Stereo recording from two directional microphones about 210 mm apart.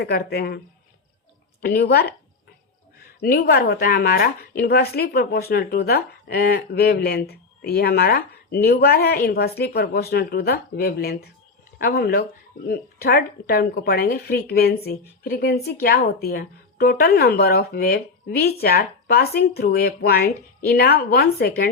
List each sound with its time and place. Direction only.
0.0 s a woman's voice: 50° left (ahead or behind)
1.6 s a woman's voice: 50° left (ahead or behind)
3.2 s a woman's voice: 50° left (ahead or behind)